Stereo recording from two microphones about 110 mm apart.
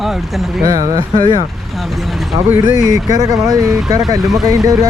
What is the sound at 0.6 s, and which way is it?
Speech, 30° right (ahead or behind).